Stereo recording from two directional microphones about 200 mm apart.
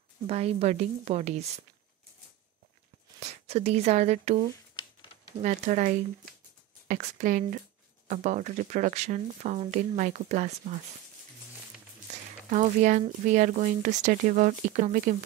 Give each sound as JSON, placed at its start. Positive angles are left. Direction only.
{"t": 0.3, "sound": "speech", "side_deg": -30}
{"t": 3.2, "sound": "speech", "side_deg": -35}
{"t": 12.4, "sound": "speech", "side_deg": -40}